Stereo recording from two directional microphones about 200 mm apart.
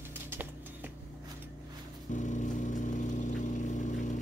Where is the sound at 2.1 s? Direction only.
40° left (ahead or behind).